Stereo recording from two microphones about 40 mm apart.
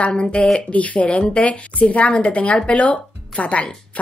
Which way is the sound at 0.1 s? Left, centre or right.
Left.